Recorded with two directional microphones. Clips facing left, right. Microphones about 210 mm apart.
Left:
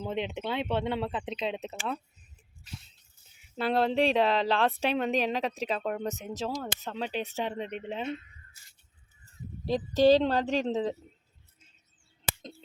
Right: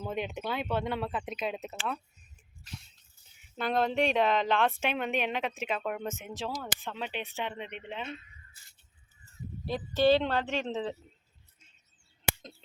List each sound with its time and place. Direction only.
0.1 s speech: 25° left (ahead or behind)
3.6 s a woman's voice: 30° left (ahead or behind)
9.6 s a woman's voice: 40° left (ahead or behind)